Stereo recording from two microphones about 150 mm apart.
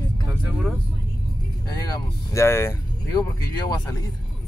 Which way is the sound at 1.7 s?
20° left (ahead or behind).